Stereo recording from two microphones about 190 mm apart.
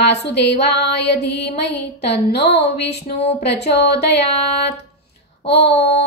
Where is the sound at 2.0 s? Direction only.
60° left (ahead or behind).